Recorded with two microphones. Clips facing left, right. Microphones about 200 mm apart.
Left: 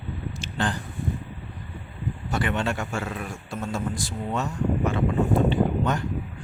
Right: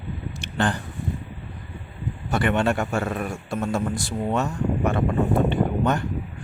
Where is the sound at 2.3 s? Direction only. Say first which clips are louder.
Right 5 dB; 60° right (ahead or behind).